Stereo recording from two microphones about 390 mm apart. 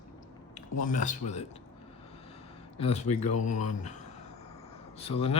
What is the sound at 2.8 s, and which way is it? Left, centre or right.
Speech, centre.